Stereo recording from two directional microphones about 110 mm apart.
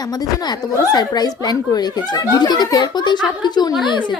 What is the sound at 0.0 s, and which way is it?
A woman's voice, 35° left (ahead or behind).